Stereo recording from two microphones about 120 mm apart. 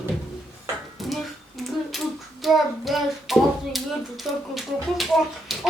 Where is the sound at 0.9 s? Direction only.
Centre (ahead or behind).